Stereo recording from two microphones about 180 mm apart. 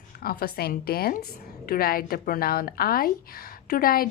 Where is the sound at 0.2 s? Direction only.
55° left (ahead or behind).